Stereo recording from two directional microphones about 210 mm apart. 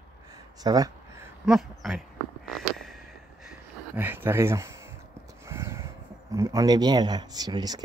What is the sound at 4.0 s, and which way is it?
Speech, 10° right (ahead or behind).